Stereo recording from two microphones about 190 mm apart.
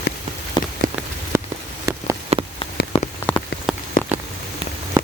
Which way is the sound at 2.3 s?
35° right (ahead or behind).